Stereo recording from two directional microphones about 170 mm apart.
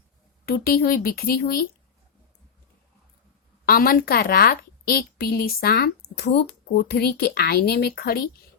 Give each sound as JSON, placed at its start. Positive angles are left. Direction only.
{"t": 0.4, "sound": "a woman's voice", "side_deg": 65}
{"t": 3.7, "sound": "a woman's voice", "side_deg": 60}